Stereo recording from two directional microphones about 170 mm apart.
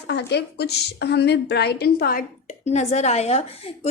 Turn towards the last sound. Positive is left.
turn(degrees=40)  # may be behind; listen again after turning